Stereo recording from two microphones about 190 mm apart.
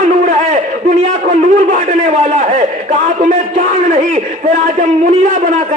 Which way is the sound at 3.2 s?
45° right (ahead or behind).